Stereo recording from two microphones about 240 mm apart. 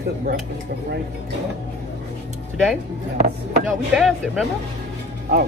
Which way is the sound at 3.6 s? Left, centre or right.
Centre.